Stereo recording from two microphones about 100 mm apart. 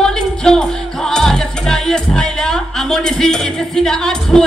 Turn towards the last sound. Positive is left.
turn(degrees=5)  # may be behind; listen again after turning